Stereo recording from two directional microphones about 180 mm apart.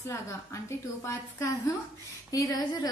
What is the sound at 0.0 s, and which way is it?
A woman's voice, 15° left (ahead or behind).